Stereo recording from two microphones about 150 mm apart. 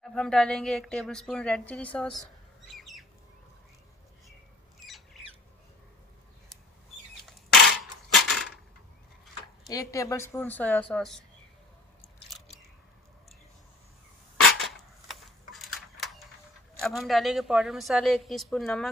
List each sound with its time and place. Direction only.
0.0 s a woman's voice: 5° left (ahead or behind)
2.7 s bird: centre (ahead or behind)
8.1 s coin: centre (ahead or behind)
9.7 s a woman's voice: 20° left (ahead or behind)
12.3 s biting: centre (ahead or behind)
14.6 s a sound: centre (ahead or behind)
16.8 s a woman's voice: centre (ahead or behind)